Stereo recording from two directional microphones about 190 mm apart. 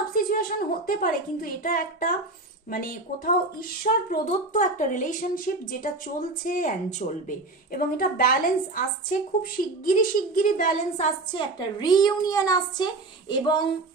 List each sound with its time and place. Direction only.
0.1 s a woman's voice: 50° left (ahead or behind)
9.4 s a woman's voice: 45° left (ahead or behind)
11.3 s a woman's voice: 20° left (ahead or behind)